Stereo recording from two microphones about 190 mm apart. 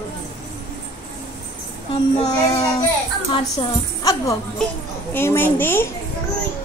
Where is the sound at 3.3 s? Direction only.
25° left (ahead or behind).